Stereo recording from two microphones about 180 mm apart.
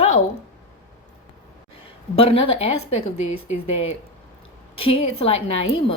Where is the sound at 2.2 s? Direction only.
30° left (ahead or behind).